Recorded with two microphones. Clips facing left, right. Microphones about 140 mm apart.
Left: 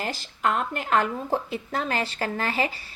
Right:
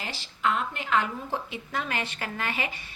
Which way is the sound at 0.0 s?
45° left (ahead or behind).